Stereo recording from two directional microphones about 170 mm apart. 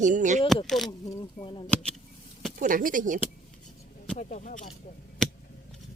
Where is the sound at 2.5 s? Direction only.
50° right (ahead or behind).